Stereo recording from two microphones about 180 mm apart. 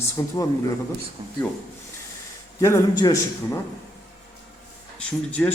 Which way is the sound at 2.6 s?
15° left (ahead or behind).